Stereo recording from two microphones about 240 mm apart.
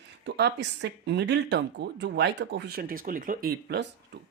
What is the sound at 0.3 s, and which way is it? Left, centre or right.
Speech, right.